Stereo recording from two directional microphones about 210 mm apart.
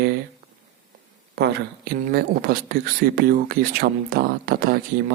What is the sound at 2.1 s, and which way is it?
Speech, 45° right (ahead or behind).